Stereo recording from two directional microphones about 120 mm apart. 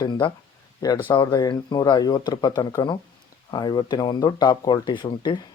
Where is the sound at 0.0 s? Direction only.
40° left (ahead or behind).